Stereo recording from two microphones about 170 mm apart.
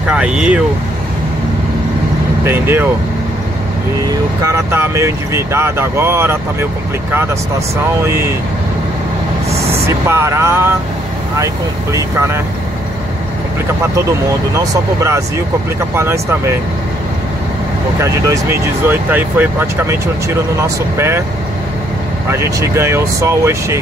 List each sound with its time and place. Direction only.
0.1 s speech: 5° right (ahead or behind)
2.4 s speech: 15° right (ahead or behind)
4.1 s speech: 15° right (ahead or behind)
8.0 s speech: 15° right (ahead or behind)
9.8 s speech: 15° right (ahead or behind)
14.5 s speech: 15° right (ahead or behind)
18.0 s speech: 15° right (ahead or behind)
22.3 s speech: 15° right (ahead or behind)